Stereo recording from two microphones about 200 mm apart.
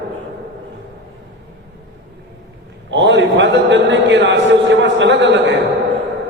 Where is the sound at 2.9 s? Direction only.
65° right (ahead or behind).